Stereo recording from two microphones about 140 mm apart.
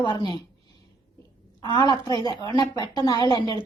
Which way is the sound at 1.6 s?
35° left (ahead or behind).